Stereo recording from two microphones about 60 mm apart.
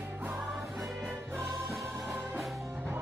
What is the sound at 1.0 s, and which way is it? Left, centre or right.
Music, right.